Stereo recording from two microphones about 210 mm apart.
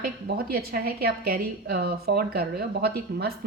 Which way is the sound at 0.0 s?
45° right (ahead or behind).